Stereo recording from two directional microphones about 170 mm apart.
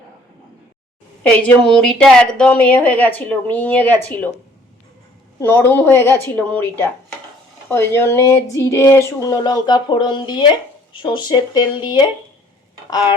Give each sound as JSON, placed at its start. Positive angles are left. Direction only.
{"t": 1.2, "sound": "a woman's voice", "side_deg": 10}
{"t": 5.4, "sound": "a woman's voice", "side_deg": 10}